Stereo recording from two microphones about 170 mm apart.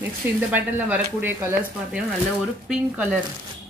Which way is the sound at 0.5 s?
10° right (ahead or behind).